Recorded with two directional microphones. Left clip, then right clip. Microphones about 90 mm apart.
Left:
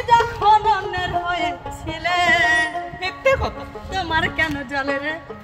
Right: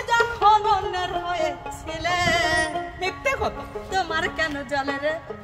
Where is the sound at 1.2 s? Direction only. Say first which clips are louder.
Left 3 dB; 35° right (ahead or behind).